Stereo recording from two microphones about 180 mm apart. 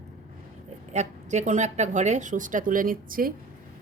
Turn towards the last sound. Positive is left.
turn(degrees=-50)  # may be behind; listen again after turning